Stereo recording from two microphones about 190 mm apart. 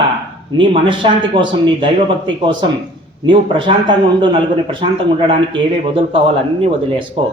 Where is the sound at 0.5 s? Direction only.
25° right (ahead or behind).